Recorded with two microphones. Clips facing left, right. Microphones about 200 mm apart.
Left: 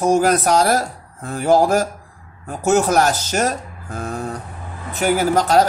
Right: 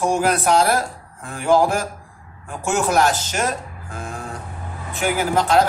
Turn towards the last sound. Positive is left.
turn(degrees=40)  # may be behind; listen again after turning